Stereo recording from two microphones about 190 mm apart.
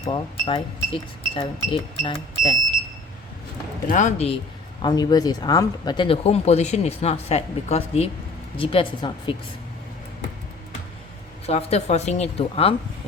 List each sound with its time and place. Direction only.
0.0 s speech: 30° left (ahead or behind)
3.8 s speech: 40° left (ahead or behind)
4.8 s speech: 20° left (ahead or behind)
11.4 s speech: 35° left (ahead or behind)